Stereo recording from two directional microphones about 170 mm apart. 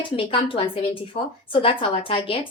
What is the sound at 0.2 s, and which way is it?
Speech, 30° left (ahead or behind).